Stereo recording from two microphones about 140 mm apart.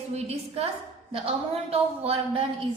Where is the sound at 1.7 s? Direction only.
45° right (ahead or behind).